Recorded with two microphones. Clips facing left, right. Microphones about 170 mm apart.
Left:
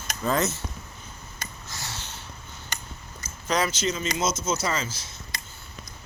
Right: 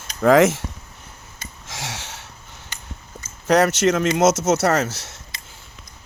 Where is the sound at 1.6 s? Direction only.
90° right.